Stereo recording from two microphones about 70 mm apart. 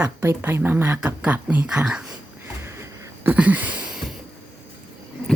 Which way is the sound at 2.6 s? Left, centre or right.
Right.